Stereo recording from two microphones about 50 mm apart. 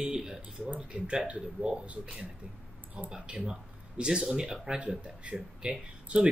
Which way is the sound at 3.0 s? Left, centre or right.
Centre.